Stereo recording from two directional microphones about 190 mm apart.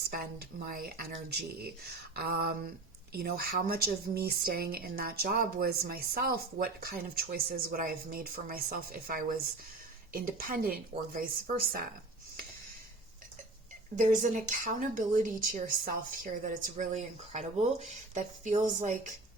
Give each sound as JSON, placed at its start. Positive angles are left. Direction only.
{"t": 0.1, "sound": "speech", "side_deg": -50}
{"t": 13.9, "sound": "speech", "side_deg": -40}